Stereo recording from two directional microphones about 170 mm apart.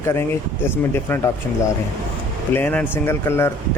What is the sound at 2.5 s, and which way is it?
Speech, 10° left (ahead or behind).